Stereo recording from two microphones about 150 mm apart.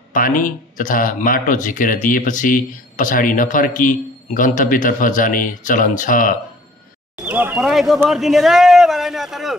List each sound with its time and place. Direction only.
0.1 s speech: 60° left (ahead or behind)
7.2 s speech: 10° right (ahead or behind)
8.1 s a sound: centre (ahead or behind)